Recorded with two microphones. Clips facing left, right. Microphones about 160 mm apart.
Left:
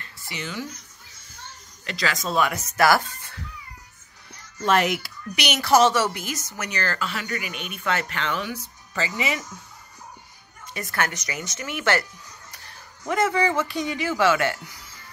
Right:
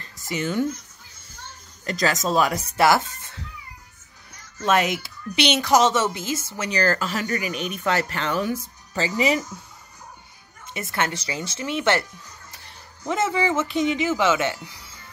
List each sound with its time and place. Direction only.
0.0 s a sound: 40° right (ahead or behind)
1.9 s speech: 40° right (ahead or behind); by 3.4 s 20° right (ahead or behind)
4.6 s speech: 20° right (ahead or behind)
6.8 s speech: 40° right (ahead or behind)
10.7 s speech: 25° right (ahead or behind)